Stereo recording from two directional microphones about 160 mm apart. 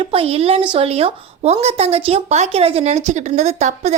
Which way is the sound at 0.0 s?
35° right (ahead or behind).